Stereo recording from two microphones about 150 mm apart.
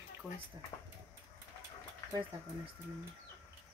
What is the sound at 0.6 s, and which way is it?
Speech, 30° right (ahead or behind).